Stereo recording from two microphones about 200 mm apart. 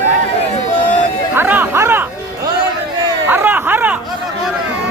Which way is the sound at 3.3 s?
10° right (ahead or behind).